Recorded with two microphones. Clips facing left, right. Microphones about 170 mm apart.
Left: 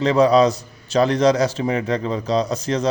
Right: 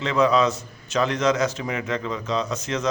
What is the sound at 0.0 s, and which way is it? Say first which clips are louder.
A man's voice: left 5 dB; 35° left (ahead or behind).